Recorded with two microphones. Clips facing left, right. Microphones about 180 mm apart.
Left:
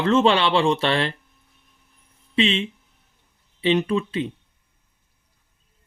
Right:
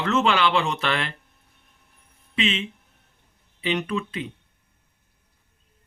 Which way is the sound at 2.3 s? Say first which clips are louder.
Left 5 dB; 30° left (ahead or behind).